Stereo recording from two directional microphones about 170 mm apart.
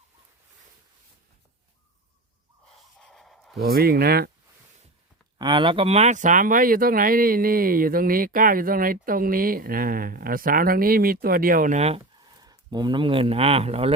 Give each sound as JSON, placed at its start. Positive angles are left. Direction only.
{"t": 2.7, "sound": "a sound", "side_deg": 0}
{"t": 3.6, "sound": "speech", "side_deg": -60}
{"t": 5.4, "sound": "speech", "side_deg": -25}
{"t": 12.2, "sound": "speech", "side_deg": -25}